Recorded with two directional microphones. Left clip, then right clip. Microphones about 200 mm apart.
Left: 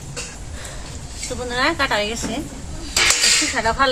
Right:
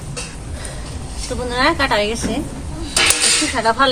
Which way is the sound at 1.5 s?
5° right (ahead or behind).